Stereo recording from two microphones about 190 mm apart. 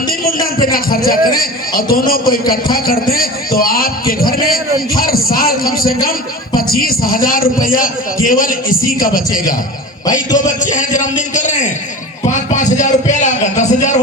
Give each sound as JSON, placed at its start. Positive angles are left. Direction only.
{"t": 0.7, "sound": "a man's voice", "side_deg": 50}
{"t": 10.3, "sound": "a man's voice", "side_deg": 40}